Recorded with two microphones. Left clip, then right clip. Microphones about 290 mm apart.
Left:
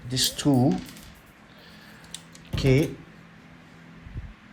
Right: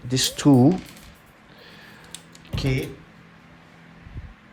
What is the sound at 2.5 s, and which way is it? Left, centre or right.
Speech, centre.